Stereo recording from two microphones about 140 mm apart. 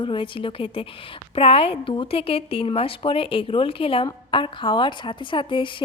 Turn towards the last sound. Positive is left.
turn(degrees=35)  # may be behind; listen again after turning